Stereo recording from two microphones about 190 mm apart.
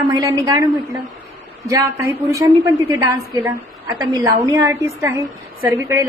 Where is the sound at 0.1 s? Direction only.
20° right (ahead or behind).